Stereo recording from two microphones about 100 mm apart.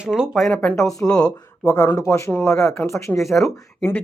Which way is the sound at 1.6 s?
25° left (ahead or behind).